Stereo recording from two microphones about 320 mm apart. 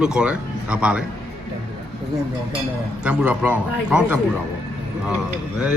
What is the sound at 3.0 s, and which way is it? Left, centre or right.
Speech, centre.